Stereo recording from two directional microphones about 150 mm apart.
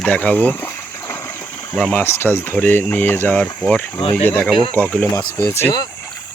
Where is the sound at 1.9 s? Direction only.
15° left (ahead or behind).